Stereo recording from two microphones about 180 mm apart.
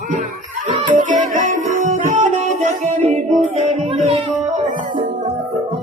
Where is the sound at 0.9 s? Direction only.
45° right (ahead or behind).